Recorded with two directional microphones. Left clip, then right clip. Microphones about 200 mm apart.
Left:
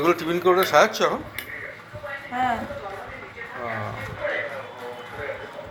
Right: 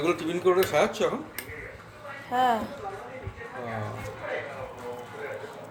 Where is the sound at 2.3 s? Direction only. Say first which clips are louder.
Right 1 dB; 55° right (ahead or behind).